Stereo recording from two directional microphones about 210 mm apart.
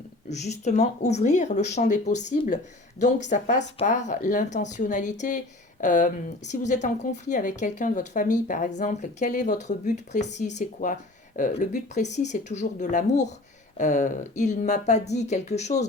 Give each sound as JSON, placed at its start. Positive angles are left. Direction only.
{"t": 0.3, "sound": "a woman's voice", "side_deg": 35}